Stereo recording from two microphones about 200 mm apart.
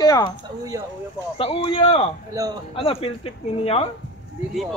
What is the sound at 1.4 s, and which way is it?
Speech, 25° left (ahead or behind).